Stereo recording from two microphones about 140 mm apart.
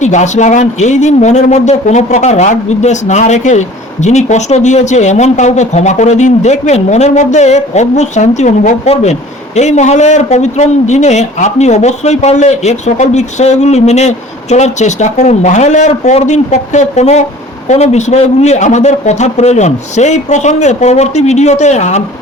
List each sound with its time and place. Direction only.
0.0 s speech: 60° left (ahead or behind)